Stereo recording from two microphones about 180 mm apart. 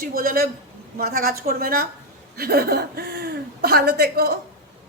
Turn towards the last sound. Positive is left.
turn(degrees=-60)  # may be behind; listen again after turning